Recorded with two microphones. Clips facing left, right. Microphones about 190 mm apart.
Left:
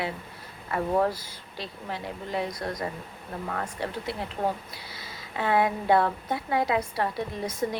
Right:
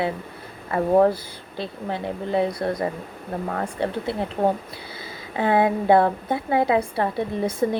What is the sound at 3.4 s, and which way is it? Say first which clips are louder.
Speech: right 5 dB; 40° right (ahead or behind).